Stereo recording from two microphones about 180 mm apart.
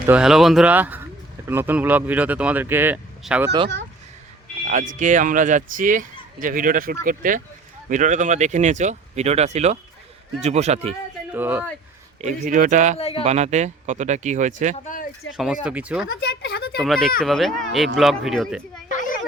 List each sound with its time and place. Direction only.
0.1 s speech: 5° right (ahead or behind)
4.6 s speech: 45° right (ahead or behind)
11.3 s speech: 10° right (ahead or behind)
12.2 s speech: 45° right (ahead or behind)
13.0 s speech: 35° left (ahead or behind)
13.2 s speech: 40° right (ahead or behind)
15.4 s speech: 5° right (ahead or behind)
16.0 s speech: 70° left (ahead or behind)
16.8 s speech: centre (ahead or behind)
18.9 s a sound: 45° left (ahead or behind)